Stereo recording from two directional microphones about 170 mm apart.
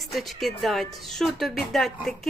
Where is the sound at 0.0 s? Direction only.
Centre (ahead or behind).